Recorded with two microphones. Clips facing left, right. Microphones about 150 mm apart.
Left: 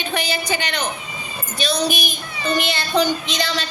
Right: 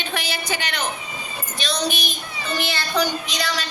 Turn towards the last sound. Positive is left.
turn(degrees=25)  # may be behind; listen again after turning